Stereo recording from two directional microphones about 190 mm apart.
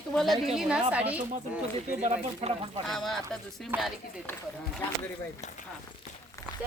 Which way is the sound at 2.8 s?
Centre (ahead or behind).